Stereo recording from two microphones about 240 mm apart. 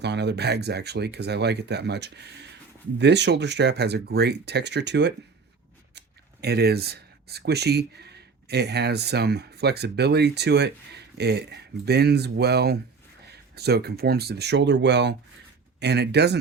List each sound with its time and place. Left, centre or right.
0.0 s speech: right
6.4 s speech: right